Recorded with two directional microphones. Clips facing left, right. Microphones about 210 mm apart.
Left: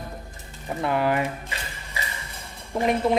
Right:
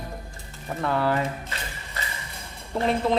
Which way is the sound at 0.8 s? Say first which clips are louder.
Left 1 dB; 15° left (ahead or behind).